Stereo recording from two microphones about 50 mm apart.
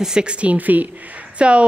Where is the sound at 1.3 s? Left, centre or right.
Right.